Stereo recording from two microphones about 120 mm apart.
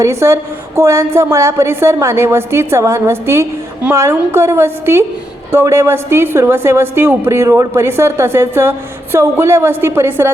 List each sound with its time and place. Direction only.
0.0 s a woman's voice: 25° right (ahead or behind)